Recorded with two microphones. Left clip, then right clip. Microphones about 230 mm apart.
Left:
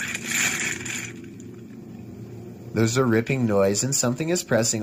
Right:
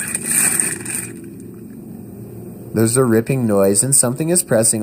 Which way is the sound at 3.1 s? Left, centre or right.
Right.